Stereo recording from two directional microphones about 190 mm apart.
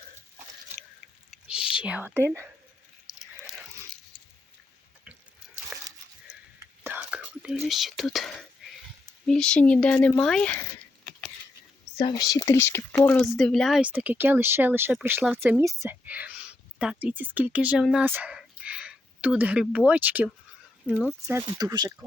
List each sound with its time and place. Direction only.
1.3 s whispering: 5° right (ahead or behind)
3.2 s a sound: centre (ahead or behind)
6.6 s whispering: 10° right (ahead or behind)
9.2 s speech: 5° left (ahead or behind)
12.1 s speech: 20° left (ahead or behind); by 21.2 s centre (ahead or behind)
21.2 s speech: 15° right (ahead or behind)